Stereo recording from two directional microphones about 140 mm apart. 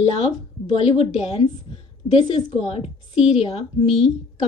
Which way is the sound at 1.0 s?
45° left (ahead or behind).